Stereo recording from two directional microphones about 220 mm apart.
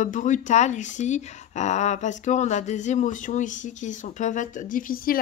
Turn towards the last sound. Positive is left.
turn(degrees=40)  # may be behind; listen again after turning